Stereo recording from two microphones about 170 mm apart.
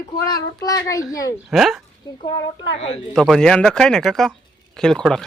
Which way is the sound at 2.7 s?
35° left (ahead or behind).